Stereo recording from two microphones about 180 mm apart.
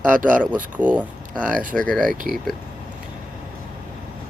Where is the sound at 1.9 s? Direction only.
5° left (ahead or behind).